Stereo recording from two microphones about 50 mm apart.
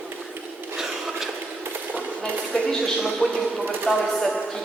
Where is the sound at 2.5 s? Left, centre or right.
Centre.